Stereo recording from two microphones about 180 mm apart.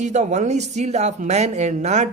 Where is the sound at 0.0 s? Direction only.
40° right (ahead or behind).